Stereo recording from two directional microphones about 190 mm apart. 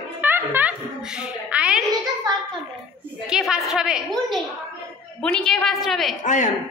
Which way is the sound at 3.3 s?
Centre (ahead or behind).